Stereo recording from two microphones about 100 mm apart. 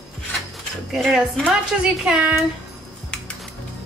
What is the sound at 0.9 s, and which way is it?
A woman's voice, 5° right (ahead or behind).